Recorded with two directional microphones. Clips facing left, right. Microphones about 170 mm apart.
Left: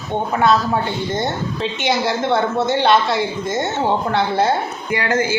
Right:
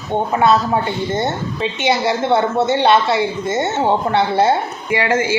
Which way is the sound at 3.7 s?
20° right (ahead or behind).